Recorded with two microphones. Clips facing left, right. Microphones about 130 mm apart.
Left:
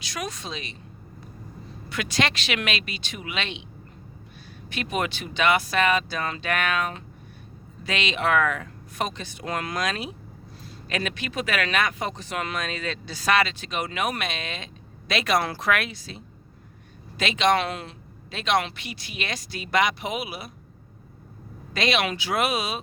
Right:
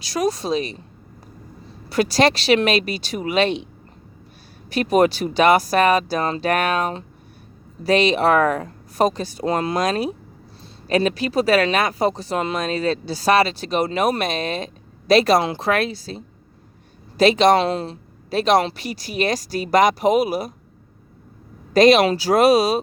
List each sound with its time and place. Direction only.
0.0 s speech: 35° right (ahead or behind)
1.9 s speech: 35° right (ahead or behind)
4.7 s speech: 40° right (ahead or behind)
15.4 s speech: 25° right (ahead or behind); by 20.5 s 40° right (ahead or behind)
21.7 s speech: 40° right (ahead or behind)